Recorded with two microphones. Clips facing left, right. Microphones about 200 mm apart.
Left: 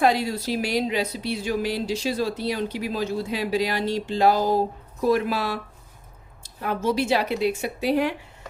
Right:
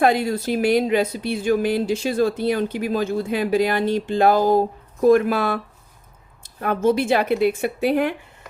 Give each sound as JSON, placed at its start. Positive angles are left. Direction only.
{"t": 0.0, "sound": "speech", "side_deg": -55}